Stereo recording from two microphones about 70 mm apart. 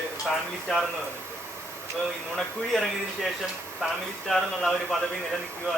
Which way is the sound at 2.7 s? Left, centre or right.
Centre.